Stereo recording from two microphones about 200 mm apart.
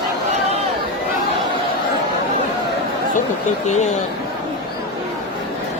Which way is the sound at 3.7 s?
35° left (ahead or behind).